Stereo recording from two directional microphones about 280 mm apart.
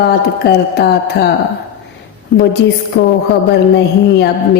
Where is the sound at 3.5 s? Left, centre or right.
Left.